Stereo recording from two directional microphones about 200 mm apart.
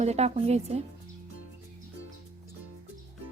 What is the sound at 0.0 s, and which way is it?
Speech, 35° right (ahead or behind).